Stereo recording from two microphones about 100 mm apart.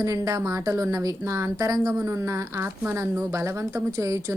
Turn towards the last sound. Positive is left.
turn(degrees=-30)  # may be behind; listen again after turning